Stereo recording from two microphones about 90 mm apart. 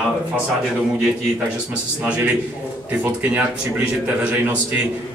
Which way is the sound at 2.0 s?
15° right (ahead or behind).